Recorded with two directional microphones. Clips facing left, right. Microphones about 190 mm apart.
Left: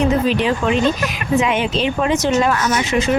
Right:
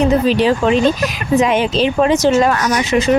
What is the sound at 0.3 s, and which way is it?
Speech, 35° right (ahead or behind).